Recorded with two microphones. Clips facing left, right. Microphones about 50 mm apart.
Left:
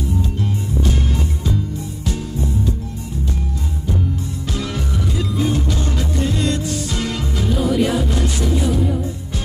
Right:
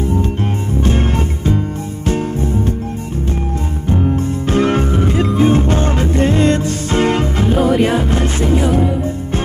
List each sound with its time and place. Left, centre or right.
0.8 s music: right
3.9 s music: right